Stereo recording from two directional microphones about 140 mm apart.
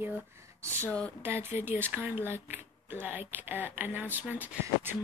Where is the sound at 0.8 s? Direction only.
10° left (ahead or behind).